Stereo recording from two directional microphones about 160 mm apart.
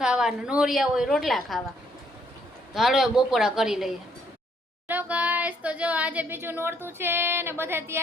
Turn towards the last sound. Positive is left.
turn(degrees=-15)  # may be behind; listen again after turning